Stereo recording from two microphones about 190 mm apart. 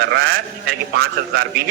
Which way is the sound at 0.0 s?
60° right (ahead or behind).